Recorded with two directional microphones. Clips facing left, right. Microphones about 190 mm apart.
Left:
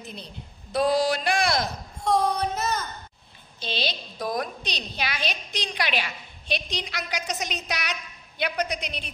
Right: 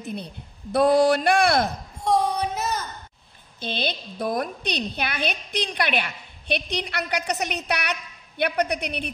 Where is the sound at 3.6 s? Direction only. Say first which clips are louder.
Right 2 dB; 55° right (ahead or behind).